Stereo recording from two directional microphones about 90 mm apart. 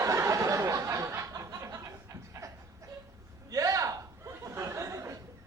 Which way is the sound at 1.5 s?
35° right (ahead or behind).